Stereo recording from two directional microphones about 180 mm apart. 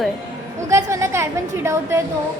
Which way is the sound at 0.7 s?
15° right (ahead or behind).